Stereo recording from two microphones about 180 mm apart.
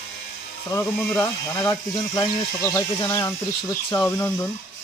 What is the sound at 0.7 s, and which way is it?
Speech, 15° left (ahead or behind).